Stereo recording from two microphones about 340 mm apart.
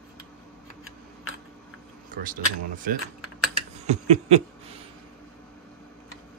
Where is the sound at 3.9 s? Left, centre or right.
Centre.